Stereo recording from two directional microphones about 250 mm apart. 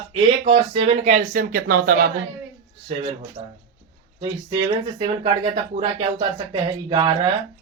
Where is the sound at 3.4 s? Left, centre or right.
Centre.